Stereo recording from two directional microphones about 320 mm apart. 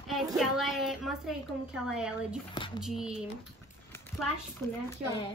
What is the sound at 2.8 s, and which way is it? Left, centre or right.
Speech, centre.